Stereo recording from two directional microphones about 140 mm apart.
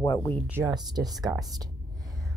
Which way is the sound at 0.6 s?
30° right (ahead or behind).